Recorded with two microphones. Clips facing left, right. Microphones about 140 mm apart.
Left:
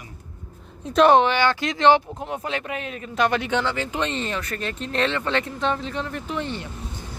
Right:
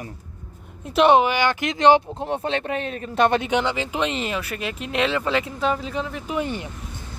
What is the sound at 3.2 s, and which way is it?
Speech, 25° right (ahead or behind).